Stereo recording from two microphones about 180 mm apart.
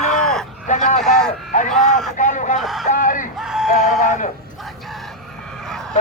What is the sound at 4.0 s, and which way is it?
Speech, 45° left (ahead or behind).